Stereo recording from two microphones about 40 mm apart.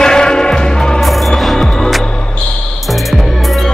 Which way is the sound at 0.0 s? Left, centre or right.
Centre.